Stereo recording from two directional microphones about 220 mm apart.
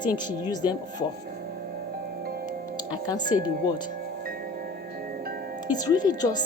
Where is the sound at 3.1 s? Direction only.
20° left (ahead or behind).